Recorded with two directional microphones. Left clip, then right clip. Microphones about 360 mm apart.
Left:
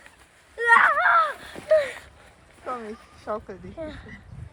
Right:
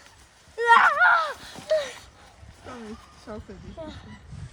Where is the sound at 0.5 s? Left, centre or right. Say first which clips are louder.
Even; centre.